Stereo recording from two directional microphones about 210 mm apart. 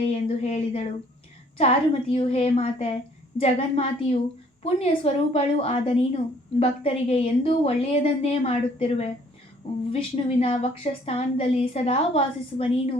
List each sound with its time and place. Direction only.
0.0 s a woman's voice: 30° left (ahead or behind)